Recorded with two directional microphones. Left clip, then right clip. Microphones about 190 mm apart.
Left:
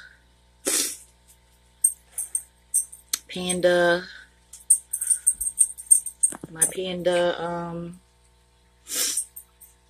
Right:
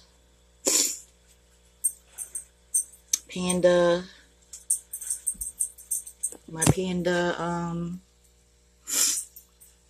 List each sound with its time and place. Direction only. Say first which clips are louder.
0.6 s a sound: right 1 dB; centre (ahead or behind)
3.1 s speech: even; centre (ahead or behind)
6.5 s speech: right 6 dB; 10° right (ahead or behind)
8.8 s music: right 1 dB; 15° right (ahead or behind)